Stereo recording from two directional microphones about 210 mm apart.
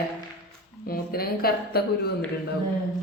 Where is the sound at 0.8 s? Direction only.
45° left (ahead or behind).